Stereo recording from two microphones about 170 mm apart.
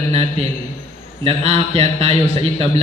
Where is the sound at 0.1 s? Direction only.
35° right (ahead or behind).